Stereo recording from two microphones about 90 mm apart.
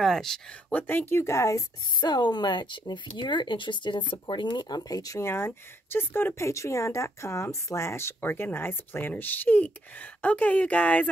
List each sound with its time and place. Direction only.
0.0 s speech: 5° left (ahead or behind); by 1.6 s 35° left (ahead or behind)
2.0 s speech: 55° left (ahead or behind); by 11.1 s 15° left (ahead or behind)